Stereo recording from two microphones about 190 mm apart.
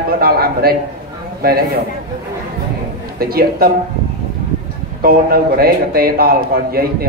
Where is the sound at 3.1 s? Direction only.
50° right (ahead or behind).